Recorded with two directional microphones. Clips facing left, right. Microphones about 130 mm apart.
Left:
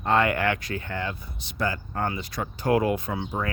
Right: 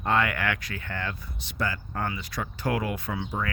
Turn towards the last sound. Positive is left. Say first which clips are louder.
# left 2 dB
turn(degrees=25)  # may be behind; listen again after turning